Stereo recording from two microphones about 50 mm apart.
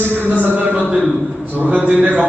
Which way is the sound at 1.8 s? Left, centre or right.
Right.